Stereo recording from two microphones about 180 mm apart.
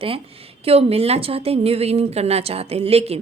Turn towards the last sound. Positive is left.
turn(degrees=-35)  # may be behind; listen again after turning